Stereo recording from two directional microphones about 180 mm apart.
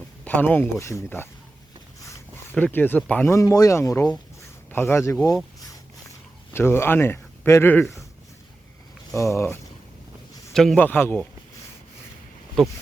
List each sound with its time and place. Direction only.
0.3 s speech: 10° left (ahead or behind)
2.6 s speech: 10° left (ahead or behind)
6.5 s speech: 15° left (ahead or behind)
9.1 s speech: 15° left (ahead or behind)
10.5 s speech: centre (ahead or behind)
12.6 s speech: centre (ahead or behind)